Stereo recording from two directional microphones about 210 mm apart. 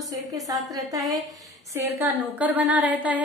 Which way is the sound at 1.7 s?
10° right (ahead or behind).